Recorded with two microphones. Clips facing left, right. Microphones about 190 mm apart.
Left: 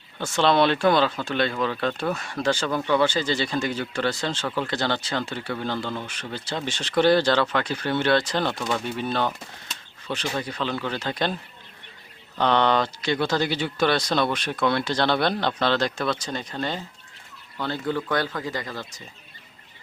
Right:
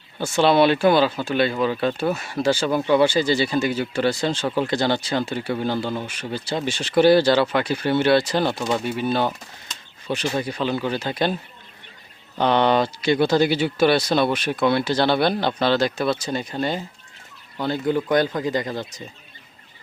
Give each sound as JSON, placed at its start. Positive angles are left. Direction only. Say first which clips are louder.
{"t": 0.2, "sound": "speech", "louder": "right 3 dB", "side_deg": -10}
{"t": 12.4, "sound": "speech", "louder": "right 3 dB", "side_deg": -10}